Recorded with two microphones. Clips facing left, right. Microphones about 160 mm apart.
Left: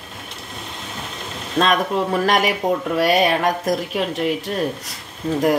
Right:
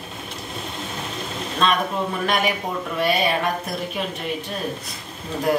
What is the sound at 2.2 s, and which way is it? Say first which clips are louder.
Speech: left 5 dB; 90° left.